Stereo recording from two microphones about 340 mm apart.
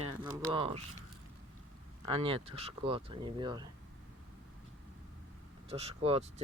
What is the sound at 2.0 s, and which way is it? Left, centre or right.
Speech, centre.